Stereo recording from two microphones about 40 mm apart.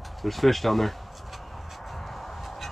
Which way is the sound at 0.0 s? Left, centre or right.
Centre.